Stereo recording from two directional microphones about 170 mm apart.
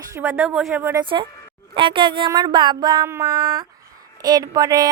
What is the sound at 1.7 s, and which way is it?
A woman's voice, 30° right (ahead or behind).